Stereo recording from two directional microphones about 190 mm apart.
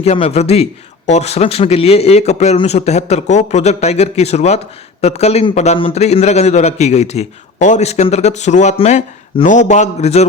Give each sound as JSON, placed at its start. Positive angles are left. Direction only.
{"t": 0.0, "sound": "a man's voice", "side_deg": 35}